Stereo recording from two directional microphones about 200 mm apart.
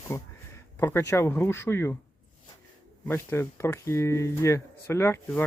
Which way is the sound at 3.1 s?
15° left (ahead or behind).